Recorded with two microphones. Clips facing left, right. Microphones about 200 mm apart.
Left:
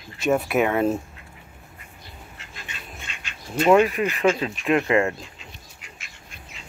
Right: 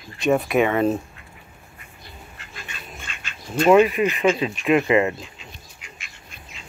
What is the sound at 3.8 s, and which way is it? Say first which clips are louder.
Speech: right 3 dB; 15° right (ahead or behind).